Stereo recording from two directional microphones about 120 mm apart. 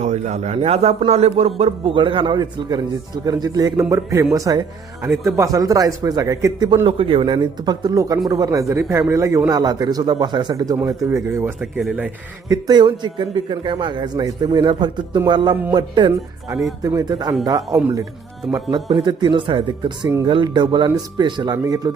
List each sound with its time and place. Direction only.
0.0 s a man's voice: 70° right (ahead or behind); by 6.7 s 25° right (ahead or behind)
6.8 s a man's voice: 45° right (ahead or behind); by 11.5 s 20° right (ahead or behind)
11.6 s speech: 5° right (ahead or behind)
12.5 s a man's voice: 35° right (ahead or behind)
16.8 s a man's voice: 30° right (ahead or behind)
18.9 s a man's voice: 40° right (ahead or behind)